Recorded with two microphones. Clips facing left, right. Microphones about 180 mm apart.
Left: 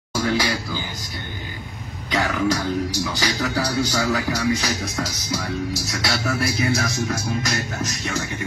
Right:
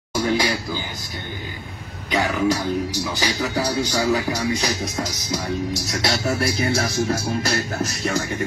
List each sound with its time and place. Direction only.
0.2 s a sound: 25° right (ahead or behind)
2.0 s cough: 15° right (ahead or behind)
3.0 s speech: 15° right (ahead or behind)
5.9 s music: 25° right (ahead or behind)